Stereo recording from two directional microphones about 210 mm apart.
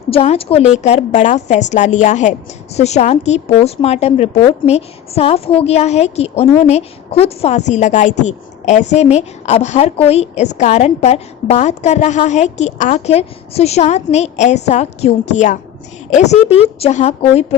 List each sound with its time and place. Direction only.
0.1 s a woman's voice: 25° left (ahead or behind)